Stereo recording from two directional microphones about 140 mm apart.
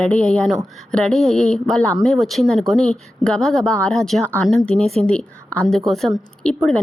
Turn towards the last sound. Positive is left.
turn(degrees=5)  # may be behind; listen again after turning